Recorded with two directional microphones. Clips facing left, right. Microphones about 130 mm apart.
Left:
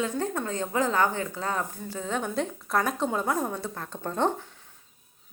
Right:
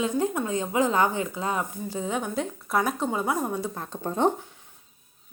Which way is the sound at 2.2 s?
5° right (ahead or behind).